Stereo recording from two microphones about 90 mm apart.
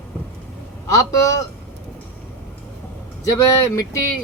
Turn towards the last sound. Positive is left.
turn(degrees=35)  # may be behind; listen again after turning